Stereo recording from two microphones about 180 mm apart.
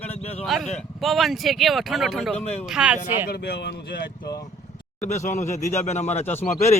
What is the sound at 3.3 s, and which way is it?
Speech, 65° left (ahead or behind).